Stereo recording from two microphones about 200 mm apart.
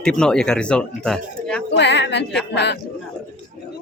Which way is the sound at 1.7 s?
60° left (ahead or behind).